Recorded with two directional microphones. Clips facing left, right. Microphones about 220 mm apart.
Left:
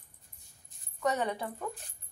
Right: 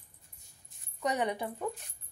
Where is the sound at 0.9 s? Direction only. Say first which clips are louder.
Even; 15° right (ahead or behind).